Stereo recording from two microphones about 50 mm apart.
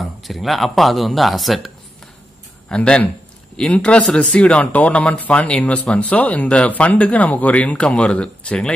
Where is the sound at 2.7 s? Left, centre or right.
Left.